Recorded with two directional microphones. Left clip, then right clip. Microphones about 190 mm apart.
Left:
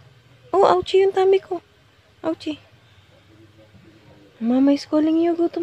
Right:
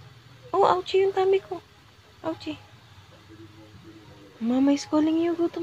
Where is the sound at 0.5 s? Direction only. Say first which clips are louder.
Left 5 dB; 40° left (ahead or behind).